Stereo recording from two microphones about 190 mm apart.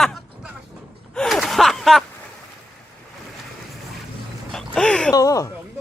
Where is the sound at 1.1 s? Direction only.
Centre (ahead or behind).